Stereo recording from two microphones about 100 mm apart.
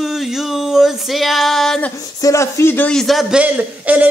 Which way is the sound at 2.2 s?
30° left (ahead or behind).